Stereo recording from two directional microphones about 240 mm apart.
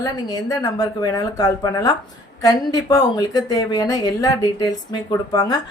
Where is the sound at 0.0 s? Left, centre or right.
Centre.